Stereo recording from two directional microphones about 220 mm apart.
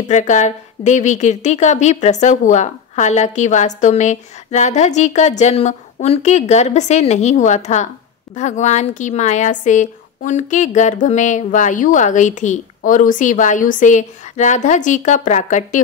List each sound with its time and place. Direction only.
0.0 s a woman's voice: 35° left (ahead or behind)